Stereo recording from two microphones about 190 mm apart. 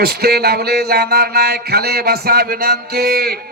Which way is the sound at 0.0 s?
55° right (ahead or behind).